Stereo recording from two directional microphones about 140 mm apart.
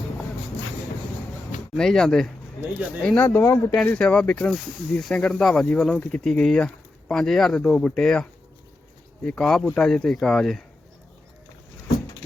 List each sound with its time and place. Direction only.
1.7 s speech: 5° left (ahead or behind)
3.2 s speech: 20° left (ahead or behind)
3.8 s speech: 10° left (ahead or behind)